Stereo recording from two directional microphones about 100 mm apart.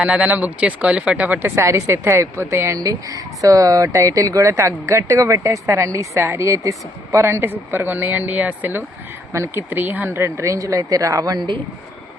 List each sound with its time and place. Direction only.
0.0 s speech: 10° right (ahead or behind); by 11.4 s 40° right (ahead or behind)